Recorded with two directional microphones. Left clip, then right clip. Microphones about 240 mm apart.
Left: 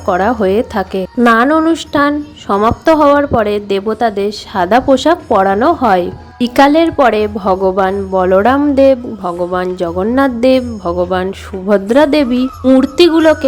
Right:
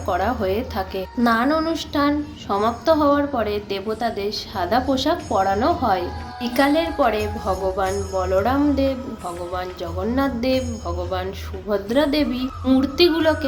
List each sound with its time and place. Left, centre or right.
0.0 s a woman's voice: left